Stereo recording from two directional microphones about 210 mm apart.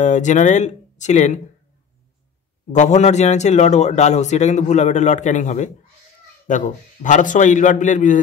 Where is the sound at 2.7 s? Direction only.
35° left (ahead or behind).